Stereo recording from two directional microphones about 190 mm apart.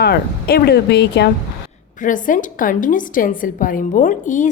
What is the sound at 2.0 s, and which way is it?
A woman's voice, 45° left (ahead or behind).